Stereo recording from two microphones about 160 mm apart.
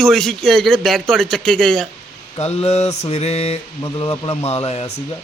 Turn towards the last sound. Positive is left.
turn(degrees=40)  # may be behind; listen again after turning